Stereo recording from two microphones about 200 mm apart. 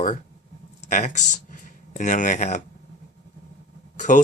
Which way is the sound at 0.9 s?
40° left (ahead or behind).